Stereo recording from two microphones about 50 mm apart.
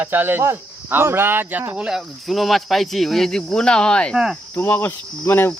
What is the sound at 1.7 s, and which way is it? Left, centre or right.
Speech, centre.